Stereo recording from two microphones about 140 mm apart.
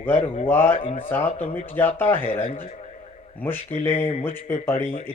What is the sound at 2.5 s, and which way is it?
Speech, 50° left (ahead or behind).